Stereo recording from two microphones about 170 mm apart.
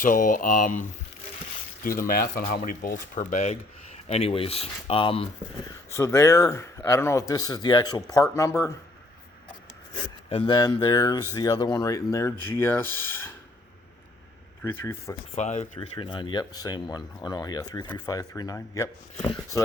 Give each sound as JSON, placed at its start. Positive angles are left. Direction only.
{"t": 0.0, "sound": "speech", "side_deg": 55}
{"t": 1.8, "sound": "speech", "side_deg": 55}
{"t": 2.4, "sound": "speech", "side_deg": 50}
{"t": 5.9, "sound": "speech", "side_deg": 15}
{"t": 10.2, "sound": "speech", "side_deg": 30}
{"t": 14.6, "sound": "speech", "side_deg": 15}
{"t": 15.4, "sound": "speech", "side_deg": 45}
{"t": 16.0, "sound": "speech", "side_deg": 25}